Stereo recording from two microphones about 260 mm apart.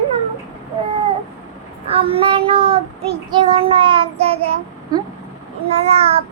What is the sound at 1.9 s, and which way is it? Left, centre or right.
Child singing, right.